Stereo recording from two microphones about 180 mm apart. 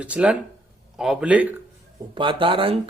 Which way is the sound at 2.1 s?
30° right (ahead or behind).